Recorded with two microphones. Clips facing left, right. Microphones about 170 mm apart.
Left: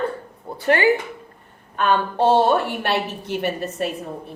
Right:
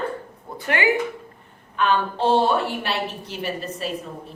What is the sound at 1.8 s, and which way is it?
A woman's voice, 50° left (ahead or behind).